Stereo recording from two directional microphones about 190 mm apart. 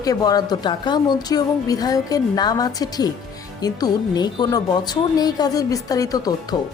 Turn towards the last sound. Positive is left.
turn(degrees=20)  # may be behind; listen again after turning